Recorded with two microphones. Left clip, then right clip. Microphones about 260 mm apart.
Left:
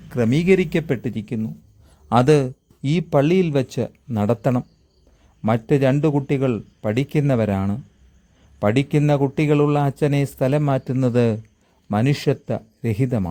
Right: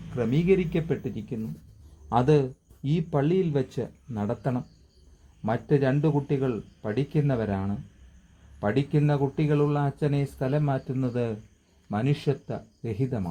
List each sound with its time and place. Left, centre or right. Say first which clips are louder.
0.2 s a man's voice: left 6 dB; left